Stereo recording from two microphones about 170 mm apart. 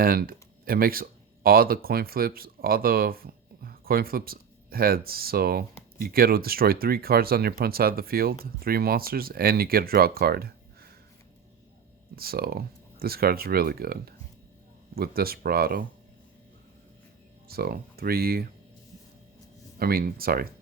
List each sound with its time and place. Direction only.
0.0 s speech: 60° right (ahead or behind)
12.1 s speech: 65° right (ahead or behind)
17.5 s speech: 65° right (ahead or behind)
19.8 s speech: 60° right (ahead or behind)